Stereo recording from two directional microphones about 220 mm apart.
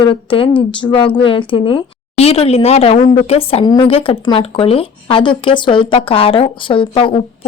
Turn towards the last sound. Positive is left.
turn(degrees=25)  # may be behind; listen again after turning